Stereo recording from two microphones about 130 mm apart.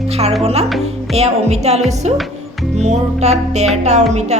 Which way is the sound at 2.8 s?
60° right (ahead or behind).